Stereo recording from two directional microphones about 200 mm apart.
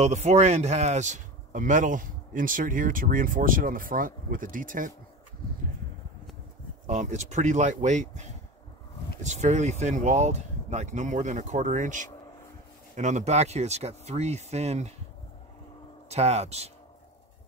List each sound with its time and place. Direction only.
0.0 s speech: 35° right (ahead or behind)
6.9 s speech: 35° right (ahead or behind)
16.1 s speech: 30° right (ahead or behind)